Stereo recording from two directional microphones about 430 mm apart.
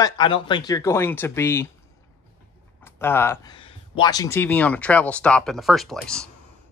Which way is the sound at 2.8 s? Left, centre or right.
Centre.